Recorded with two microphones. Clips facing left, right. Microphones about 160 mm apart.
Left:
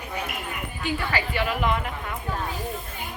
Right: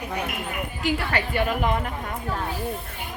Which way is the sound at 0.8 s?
75° right (ahead or behind).